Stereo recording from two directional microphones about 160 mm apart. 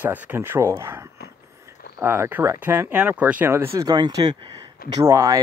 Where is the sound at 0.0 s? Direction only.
10° right (ahead or behind).